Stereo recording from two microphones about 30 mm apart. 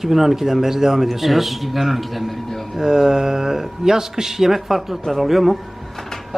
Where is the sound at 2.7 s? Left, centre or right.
Centre.